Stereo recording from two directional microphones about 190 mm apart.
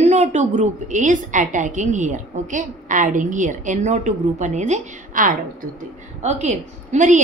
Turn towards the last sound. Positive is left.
turn(degrees=-40)  # may be behind; listen again after turning